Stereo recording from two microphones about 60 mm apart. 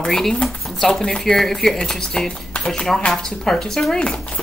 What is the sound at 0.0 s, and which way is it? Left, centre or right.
Speech, centre.